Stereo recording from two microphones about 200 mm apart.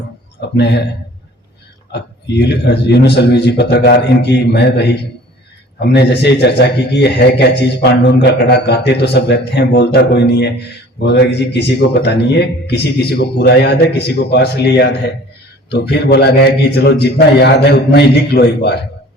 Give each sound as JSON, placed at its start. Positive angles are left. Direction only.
{"t": 0.5, "sound": "a man's voice", "side_deg": 55}
{"t": 1.9, "sound": "a man's voice", "side_deg": 55}